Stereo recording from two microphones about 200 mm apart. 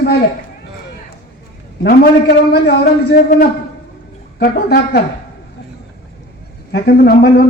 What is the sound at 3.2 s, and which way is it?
A woman's voice, 45° left (ahead or behind).